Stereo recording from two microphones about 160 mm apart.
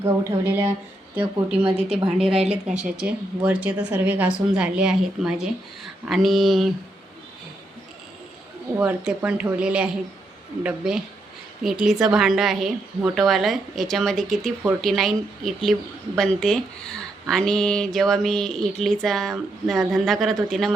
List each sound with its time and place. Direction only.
0.0 s a woman's voice: 15° right (ahead or behind)
8.8 s a woman's voice: 5° right (ahead or behind)